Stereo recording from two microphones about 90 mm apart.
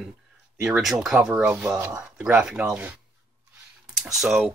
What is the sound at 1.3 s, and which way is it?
Speech, 15° right (ahead or behind).